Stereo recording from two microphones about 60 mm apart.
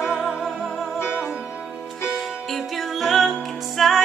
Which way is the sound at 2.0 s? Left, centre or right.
Centre.